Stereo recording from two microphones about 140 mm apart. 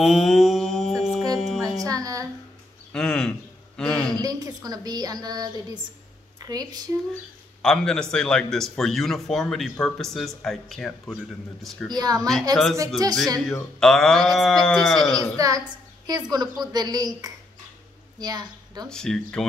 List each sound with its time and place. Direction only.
0.0 s mantra: centre (ahead or behind)
1.3 s music: 5° left (ahead or behind)
1.8 s music: 25° right (ahead or behind)
2.9 s a sound: 5° left (ahead or behind)
3.7 s a man's voice: 5° left (ahead or behind)
4.1 s a woman's voice: 25° right (ahead or behind)
7.6 s speech: 5° left (ahead or behind)
11.9 s a woman's voice: 30° right (ahead or behind)
13.5 s speech: 5° left (ahead or behind)
15.1 s a woman's voice: 25° right (ahead or behind)
18.9 s speech: 5° left (ahead or behind)